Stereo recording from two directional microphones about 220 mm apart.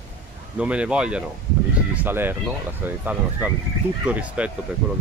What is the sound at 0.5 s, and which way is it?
Speech, 5° right (ahead or behind).